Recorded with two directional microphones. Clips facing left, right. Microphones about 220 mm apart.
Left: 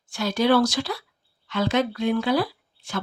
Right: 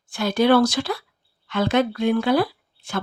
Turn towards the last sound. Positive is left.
turn(degrees=-55)  # may be behind; listen again after turning